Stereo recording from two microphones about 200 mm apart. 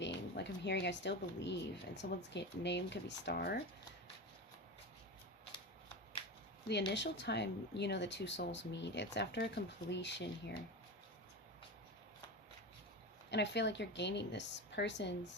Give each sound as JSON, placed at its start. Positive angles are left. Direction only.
{"t": 0.0, "sound": "speech", "side_deg": 60}
{"t": 6.7, "sound": "speech", "side_deg": 60}
{"t": 13.3, "sound": "speech", "side_deg": 60}